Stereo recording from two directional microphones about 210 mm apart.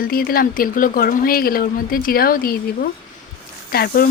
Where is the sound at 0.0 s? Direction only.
45° left (ahead or behind).